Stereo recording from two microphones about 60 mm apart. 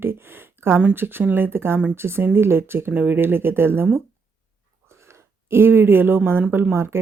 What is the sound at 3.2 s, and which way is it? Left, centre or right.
Speech, right.